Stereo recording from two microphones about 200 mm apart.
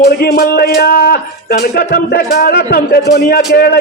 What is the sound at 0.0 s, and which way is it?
Speech, 50° left (ahead or behind).